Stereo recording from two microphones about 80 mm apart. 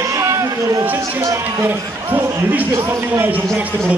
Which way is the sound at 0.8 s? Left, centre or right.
Right.